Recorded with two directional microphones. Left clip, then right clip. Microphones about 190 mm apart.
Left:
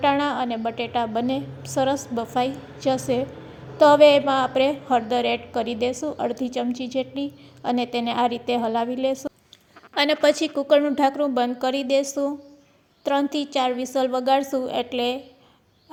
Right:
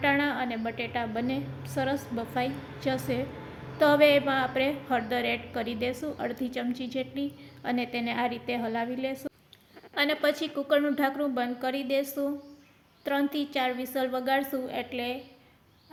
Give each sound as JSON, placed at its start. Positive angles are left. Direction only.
{"t": 0.0, "sound": "a woman's voice", "side_deg": 30}